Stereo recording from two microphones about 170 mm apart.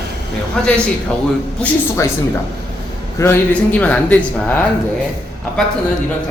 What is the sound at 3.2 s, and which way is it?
Speech, 10° left (ahead or behind).